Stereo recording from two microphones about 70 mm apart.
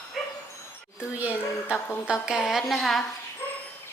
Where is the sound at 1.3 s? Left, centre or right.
Left.